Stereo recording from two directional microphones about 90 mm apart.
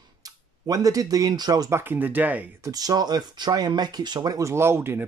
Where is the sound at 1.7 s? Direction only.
25° right (ahead or behind).